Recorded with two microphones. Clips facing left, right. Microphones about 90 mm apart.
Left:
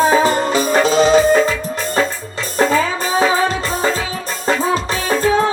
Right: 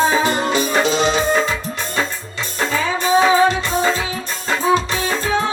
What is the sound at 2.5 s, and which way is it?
Music, 40° left (ahead or behind).